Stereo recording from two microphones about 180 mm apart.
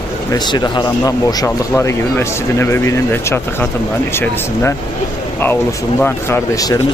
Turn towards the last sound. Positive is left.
turn(degrees=20)  # may be behind; listen again after turning